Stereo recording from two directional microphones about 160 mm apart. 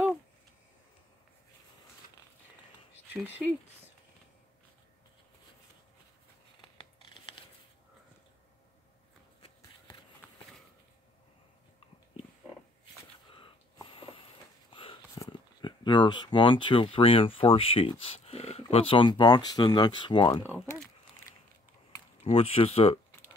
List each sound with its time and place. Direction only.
3.1 s speech: 10° right (ahead or behind)
13.3 s a sound: 35° left (ahead or behind)
15.1 s speech: 25° left (ahead or behind)
20.4 s speech: 10° right (ahead or behind)
22.2 s speech: 40° left (ahead or behind)